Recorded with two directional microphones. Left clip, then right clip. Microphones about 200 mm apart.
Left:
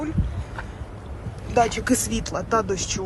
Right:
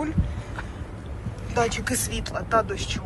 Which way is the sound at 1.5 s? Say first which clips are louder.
Left 4 dB; 45° left (ahead or behind).